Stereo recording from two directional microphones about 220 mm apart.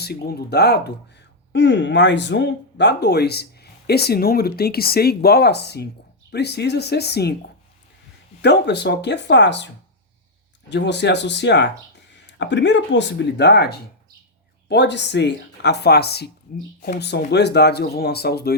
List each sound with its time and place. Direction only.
0.0 s speech: 45° left (ahead or behind)
8.4 s speech: 50° left (ahead or behind)
10.7 s speech: 50° left (ahead or behind)